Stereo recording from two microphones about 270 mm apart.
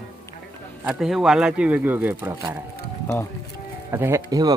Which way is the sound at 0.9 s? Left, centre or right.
Centre.